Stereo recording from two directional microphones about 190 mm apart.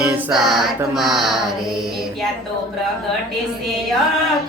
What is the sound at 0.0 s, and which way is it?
Choir, 5° right (ahead or behind).